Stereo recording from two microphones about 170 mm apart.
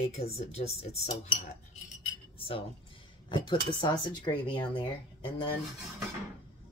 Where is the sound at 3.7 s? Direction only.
25° left (ahead or behind).